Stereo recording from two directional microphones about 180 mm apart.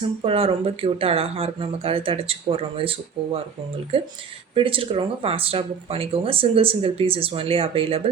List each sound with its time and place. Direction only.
0.2 s speech: 30° right (ahead or behind)
4.5 s speech: 30° right (ahead or behind)